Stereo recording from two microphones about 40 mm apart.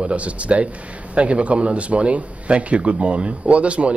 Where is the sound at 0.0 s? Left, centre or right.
Right.